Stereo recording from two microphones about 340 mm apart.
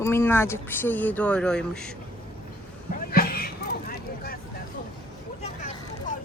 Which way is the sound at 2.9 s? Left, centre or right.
Left.